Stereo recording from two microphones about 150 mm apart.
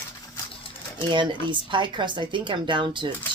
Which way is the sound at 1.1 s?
30° right (ahead or behind).